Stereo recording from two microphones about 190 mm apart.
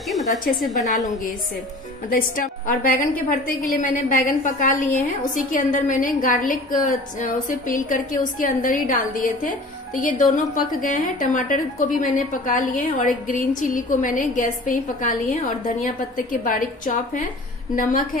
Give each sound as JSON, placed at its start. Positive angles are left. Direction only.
{"t": 0.6, "sound": "a woman's voice", "side_deg": 0}
{"t": 2.0, "sound": "a woman's voice", "side_deg": 45}